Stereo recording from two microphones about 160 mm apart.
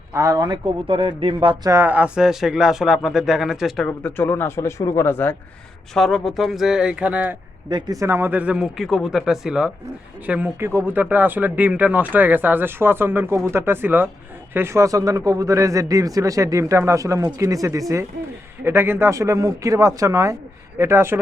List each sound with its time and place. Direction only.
0.1 s a man's voice: 20° right (ahead or behind)
1.7 s speech: 10° right (ahead or behind); by 5.4 s 15° left (ahead or behind)
5.9 s speech: centre (ahead or behind)
7.7 s a man's voice: 25° right (ahead or behind)